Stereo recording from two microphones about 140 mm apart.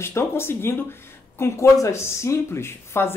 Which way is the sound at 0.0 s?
20° left (ahead or behind).